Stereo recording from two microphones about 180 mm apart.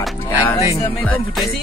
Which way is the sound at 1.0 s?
5° left (ahead or behind).